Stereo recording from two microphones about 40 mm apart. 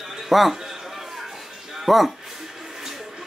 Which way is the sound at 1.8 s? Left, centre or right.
Centre.